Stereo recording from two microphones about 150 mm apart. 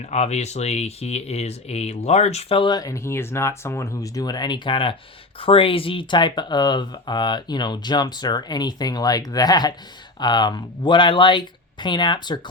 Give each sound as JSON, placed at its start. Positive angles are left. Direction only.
{"t": 0.0, "sound": "speech", "side_deg": 50}